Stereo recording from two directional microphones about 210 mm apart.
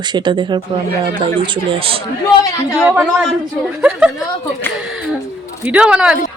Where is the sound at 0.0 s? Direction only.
20° right (ahead or behind).